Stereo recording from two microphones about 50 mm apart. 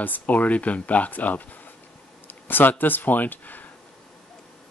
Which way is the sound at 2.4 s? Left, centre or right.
Left.